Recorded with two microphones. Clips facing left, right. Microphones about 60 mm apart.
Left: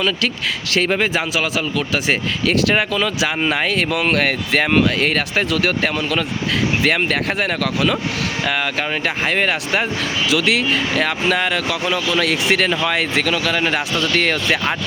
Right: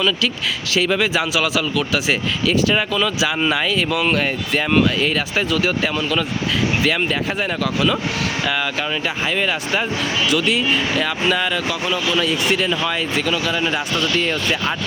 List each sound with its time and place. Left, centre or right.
0.9 s speech: left
8.4 s speech: left
10.2 s speech: left
11.0 s speech: left
12.2 s speech: left